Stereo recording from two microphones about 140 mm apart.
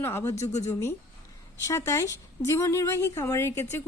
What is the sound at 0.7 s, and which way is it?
A woman's voice, 20° left (ahead or behind).